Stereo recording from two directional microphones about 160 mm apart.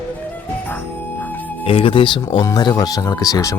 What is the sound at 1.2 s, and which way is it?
Music, 10° left (ahead or behind).